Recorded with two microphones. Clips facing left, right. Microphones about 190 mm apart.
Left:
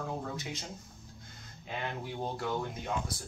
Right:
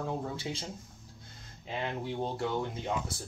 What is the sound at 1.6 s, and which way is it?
Speech, 25° right (ahead or behind).